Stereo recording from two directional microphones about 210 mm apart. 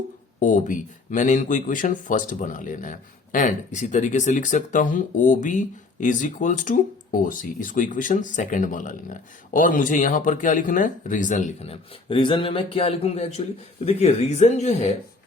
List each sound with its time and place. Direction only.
0.3 s speech: 35° left (ahead or behind)